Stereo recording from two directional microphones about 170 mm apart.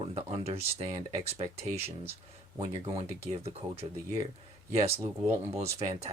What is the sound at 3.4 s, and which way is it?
Speech, 35° right (ahead or behind).